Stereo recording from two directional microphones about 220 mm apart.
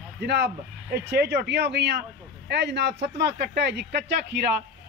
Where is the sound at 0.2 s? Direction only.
50° right (ahead or behind).